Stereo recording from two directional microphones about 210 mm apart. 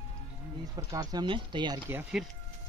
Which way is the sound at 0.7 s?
15° right (ahead or behind).